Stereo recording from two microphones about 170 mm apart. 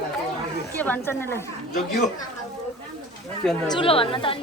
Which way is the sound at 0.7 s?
10° left (ahead or behind).